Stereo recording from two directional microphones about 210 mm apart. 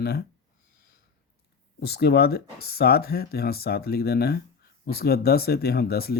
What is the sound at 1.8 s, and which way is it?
Speech, 50° left (ahead or behind).